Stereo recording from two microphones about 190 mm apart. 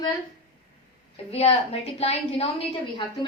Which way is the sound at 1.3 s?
30° left (ahead or behind).